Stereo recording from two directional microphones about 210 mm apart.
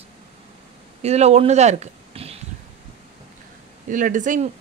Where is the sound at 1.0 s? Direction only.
30° right (ahead or behind).